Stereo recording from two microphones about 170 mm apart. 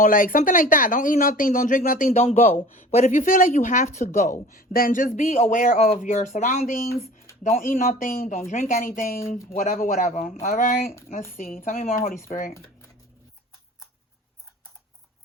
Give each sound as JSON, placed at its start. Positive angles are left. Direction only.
{"t": 0.0, "sound": "a man's voice", "side_deg": 55}
{"t": 2.1, "sound": "a man's voice", "side_deg": 40}